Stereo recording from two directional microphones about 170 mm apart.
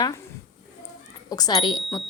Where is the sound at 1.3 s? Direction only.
25° left (ahead or behind).